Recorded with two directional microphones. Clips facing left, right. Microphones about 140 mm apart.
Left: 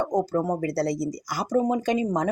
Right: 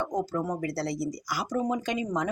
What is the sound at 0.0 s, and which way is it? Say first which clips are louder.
Speech: left 5 dB; 40° left (ahead or behind).